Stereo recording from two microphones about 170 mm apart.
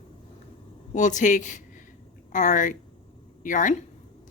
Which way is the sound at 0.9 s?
45° left (ahead or behind).